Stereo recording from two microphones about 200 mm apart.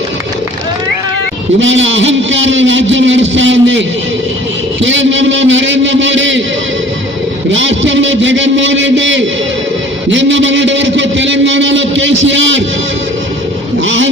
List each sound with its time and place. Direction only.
1.5 s a man's voice: 70° right (ahead or behind)
7.5 s a man's voice: 70° right (ahead or behind)
13.8 s a man's voice: 70° right (ahead or behind)